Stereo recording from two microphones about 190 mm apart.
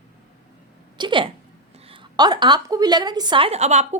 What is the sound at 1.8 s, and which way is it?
A woman's voice, 25° right (ahead or behind).